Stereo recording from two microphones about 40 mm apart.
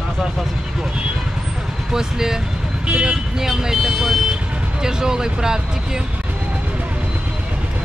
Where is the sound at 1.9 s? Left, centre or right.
Centre.